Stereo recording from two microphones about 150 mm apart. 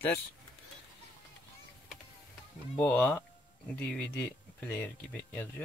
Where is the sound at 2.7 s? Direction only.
10° left (ahead or behind).